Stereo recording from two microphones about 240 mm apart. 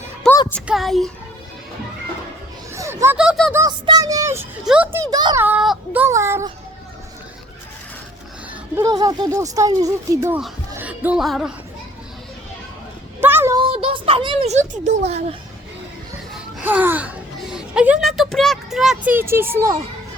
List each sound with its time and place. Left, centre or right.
0.3 s music: centre
0.7 s speech: centre
2.7 s speech: centre
3.5 s a child's voice: centre
8.7 s a child's voice: centre
13.2 s a sound: centre
13.6 s a child's voice: right
16.3 s speech: centre